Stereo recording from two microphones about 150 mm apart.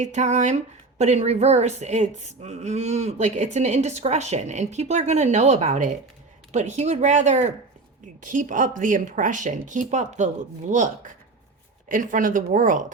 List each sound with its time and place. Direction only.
0.0 s speech: 50° right (ahead or behind)